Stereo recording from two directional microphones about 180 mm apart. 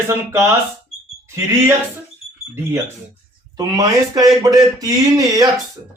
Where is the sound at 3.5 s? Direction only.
20° right (ahead or behind).